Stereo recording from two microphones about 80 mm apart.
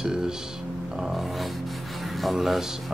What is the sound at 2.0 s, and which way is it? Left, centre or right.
Music, centre.